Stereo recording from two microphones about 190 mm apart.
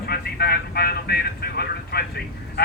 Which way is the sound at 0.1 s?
55° left (ahead or behind).